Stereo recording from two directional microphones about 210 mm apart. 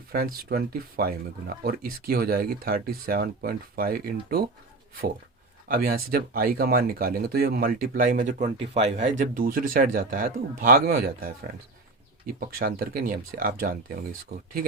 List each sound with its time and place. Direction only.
0.1 s speech: 45° right (ahead or behind)
5.6 s speech: 45° right (ahead or behind)